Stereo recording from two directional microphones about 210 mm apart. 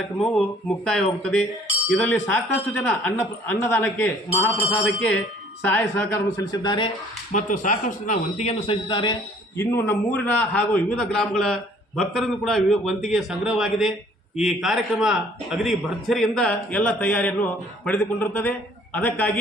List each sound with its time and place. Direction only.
0.9 s a man's voice: 5° left (ahead or behind)
5.6 s speech: 10° left (ahead or behind)
7.3 s a man's voice: 40° left (ahead or behind); by 9.1 s 25° left (ahead or behind)
9.6 s a man's voice: 10° left (ahead or behind)